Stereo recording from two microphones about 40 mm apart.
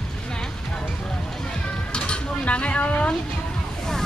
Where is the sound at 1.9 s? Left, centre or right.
Left.